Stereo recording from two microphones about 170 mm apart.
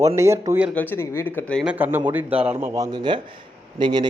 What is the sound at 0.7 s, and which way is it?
Speech, 15° left (ahead or behind).